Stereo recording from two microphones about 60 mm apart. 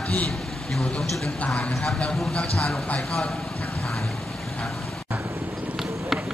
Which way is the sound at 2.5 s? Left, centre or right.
Centre.